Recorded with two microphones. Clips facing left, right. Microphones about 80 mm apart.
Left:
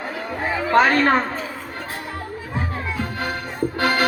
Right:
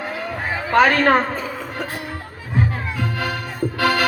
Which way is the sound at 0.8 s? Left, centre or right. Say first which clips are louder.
Right 2 dB; right.